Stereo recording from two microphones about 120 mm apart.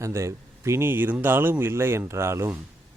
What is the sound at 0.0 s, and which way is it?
Speech, 25° right (ahead or behind).